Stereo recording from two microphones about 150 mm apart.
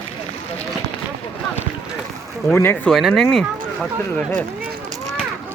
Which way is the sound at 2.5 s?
15° left (ahead or behind).